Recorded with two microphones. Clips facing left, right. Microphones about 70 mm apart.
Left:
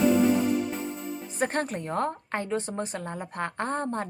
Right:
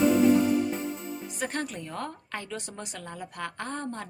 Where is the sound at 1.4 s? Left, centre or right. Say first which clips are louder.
Left 6 dB; left.